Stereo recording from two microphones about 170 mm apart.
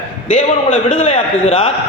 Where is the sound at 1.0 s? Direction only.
40° left (ahead or behind).